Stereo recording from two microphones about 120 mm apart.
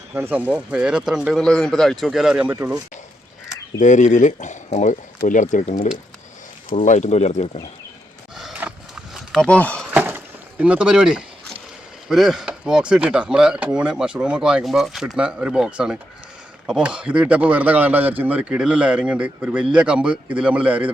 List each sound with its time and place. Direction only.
0.2 s speech: 15° right (ahead or behind)
3.8 s speech: 90° left; by 7.4 s 65° left (ahead or behind)
8.4 s horse: 5° right (ahead or behind)
9.1 s speech: 5° left (ahead or behind)
9.9 s a sound: 15° right (ahead or behind)
12.0 s speech: centre (ahead or behind)